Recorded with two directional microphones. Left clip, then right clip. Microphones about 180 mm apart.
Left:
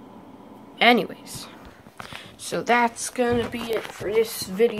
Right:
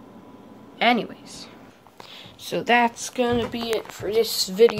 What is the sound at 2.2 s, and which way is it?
Speech, 15° right (ahead or behind).